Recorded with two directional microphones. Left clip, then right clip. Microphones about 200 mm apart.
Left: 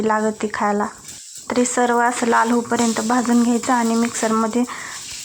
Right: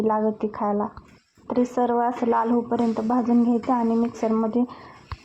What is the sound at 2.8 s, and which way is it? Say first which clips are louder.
Speech: left 4 dB; 30° left (ahead or behind).